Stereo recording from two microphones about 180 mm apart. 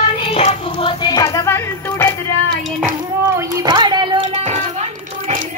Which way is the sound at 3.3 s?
25° right (ahead or behind).